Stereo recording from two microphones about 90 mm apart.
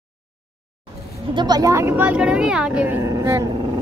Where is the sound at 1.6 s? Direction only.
35° right (ahead or behind).